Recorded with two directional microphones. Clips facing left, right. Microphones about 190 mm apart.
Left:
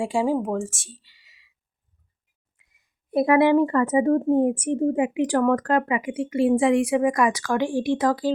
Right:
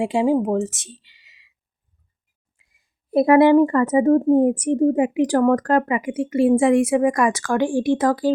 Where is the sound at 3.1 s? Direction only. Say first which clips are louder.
Right 4 dB; 35° right (ahead or behind).